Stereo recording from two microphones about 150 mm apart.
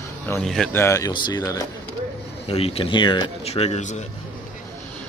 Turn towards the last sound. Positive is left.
turn(degrees=50)  # may be behind; listen again after turning